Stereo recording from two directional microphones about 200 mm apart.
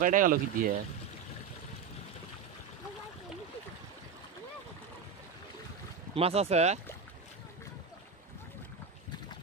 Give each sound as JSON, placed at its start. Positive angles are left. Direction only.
{"t": 0.0, "sound": "speech", "side_deg": -40}
{"t": 6.1, "sound": "speech", "side_deg": -30}